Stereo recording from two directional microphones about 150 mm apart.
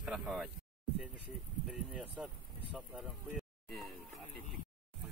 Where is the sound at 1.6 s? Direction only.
5° right (ahead or behind).